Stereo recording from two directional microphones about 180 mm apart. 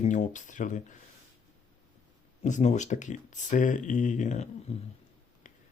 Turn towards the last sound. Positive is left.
turn(degrees=40)  # may be behind; listen again after turning